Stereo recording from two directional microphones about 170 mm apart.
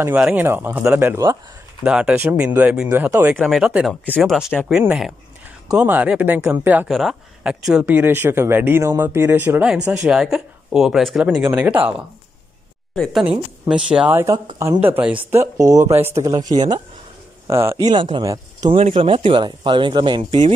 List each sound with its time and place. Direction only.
0.0 s speech: 10° right (ahead or behind)
1.9 s speech: 5° right (ahead or behind)
12.9 s speech: 5° left (ahead or behind); by 15.6 s 15° right (ahead or behind)
15.6 s speech: 45° right (ahead or behind)
15.9 s speech: 15° right (ahead or behind); by 20.5 s 30° right (ahead or behind)